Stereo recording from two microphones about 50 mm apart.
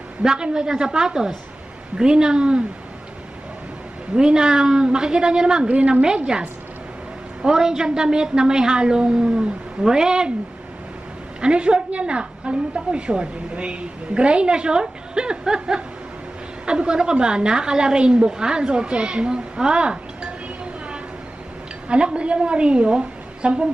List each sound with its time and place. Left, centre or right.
0.2 s a woman's voice: centre
4.1 s a woman's voice: centre
7.4 s a woman's voice: centre
11.4 s a woman's voice: centre
21.8 s a woman's voice: right